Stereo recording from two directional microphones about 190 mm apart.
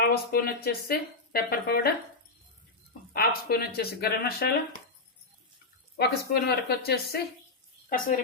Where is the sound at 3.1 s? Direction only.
55° left (ahead or behind).